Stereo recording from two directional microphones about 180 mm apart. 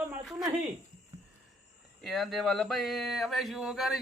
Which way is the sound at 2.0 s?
Centre (ahead or behind).